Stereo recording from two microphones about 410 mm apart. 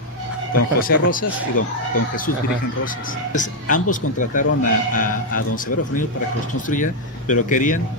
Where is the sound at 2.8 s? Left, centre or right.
Centre.